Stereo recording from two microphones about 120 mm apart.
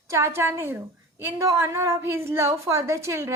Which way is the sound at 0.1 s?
20° right (ahead or behind).